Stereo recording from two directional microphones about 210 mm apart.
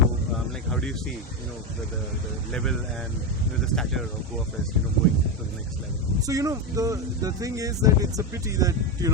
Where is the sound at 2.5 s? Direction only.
5° left (ahead or behind).